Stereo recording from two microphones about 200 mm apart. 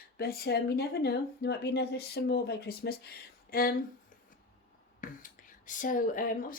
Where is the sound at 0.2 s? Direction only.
50° left (ahead or behind).